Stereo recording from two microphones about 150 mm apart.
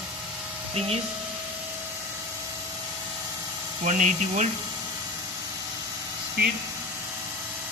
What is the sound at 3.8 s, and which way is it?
Speech, 55° right (ahead or behind).